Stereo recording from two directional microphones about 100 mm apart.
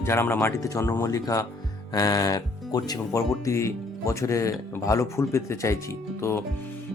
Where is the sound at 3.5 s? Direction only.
30° left (ahead or behind).